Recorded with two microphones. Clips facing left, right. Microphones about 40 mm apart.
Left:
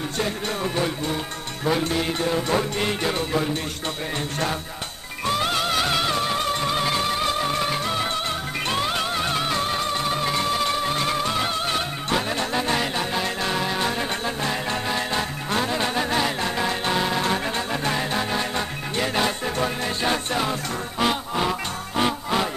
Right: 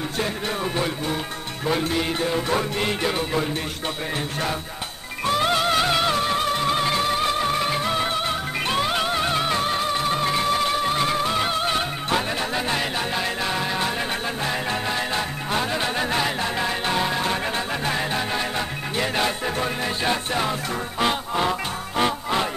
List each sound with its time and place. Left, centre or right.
0.2 s speech: centre
5.2 s music: centre